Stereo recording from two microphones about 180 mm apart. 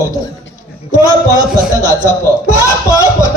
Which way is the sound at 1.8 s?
15° left (ahead or behind).